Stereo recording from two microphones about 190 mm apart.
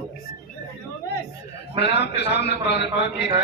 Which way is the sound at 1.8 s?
60° left (ahead or behind).